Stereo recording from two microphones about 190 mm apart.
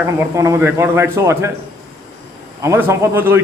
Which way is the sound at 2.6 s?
15° right (ahead or behind).